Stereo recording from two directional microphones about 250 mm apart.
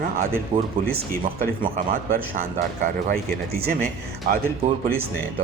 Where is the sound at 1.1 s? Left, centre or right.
Right.